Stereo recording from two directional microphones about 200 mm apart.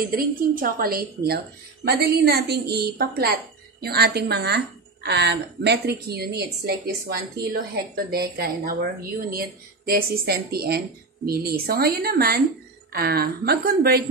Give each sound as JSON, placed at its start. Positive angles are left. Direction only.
{"t": 0.0, "sound": "a woman's voice", "side_deg": -45}